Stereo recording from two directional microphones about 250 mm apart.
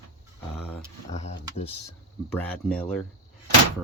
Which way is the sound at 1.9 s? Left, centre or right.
Centre.